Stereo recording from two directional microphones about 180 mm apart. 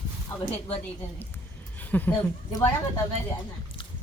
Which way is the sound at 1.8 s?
10° left (ahead or behind).